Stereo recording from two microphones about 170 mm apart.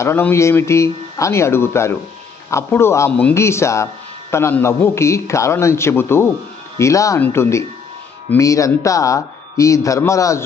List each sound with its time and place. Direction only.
0.0 s a man's voice: 15° left (ahead or behind)